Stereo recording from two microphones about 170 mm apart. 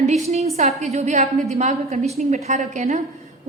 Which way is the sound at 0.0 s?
40° right (ahead or behind).